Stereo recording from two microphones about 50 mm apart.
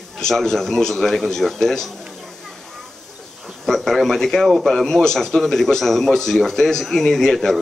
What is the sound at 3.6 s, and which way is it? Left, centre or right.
A man's voice, centre.